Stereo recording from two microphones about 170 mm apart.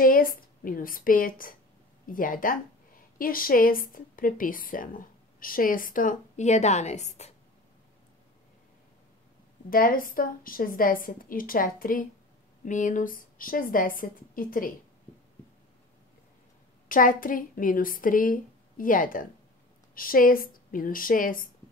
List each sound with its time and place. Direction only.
0.0 s a woman's voice: 55° left (ahead or behind); by 7.3 s 40° left (ahead or behind)
9.7 s a woman's voice: 55° left (ahead or behind)
16.9 s a woman's voice: 55° left (ahead or behind)